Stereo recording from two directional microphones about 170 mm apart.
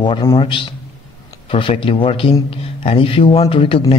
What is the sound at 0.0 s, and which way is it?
A man's voice, 25° left (ahead or behind).